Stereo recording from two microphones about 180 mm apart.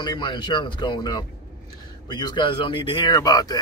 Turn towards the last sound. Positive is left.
turn(degrees=20)  # may be behind; listen again after turning